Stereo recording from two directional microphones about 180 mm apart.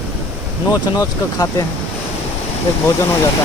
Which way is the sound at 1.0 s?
20° left (ahead or behind).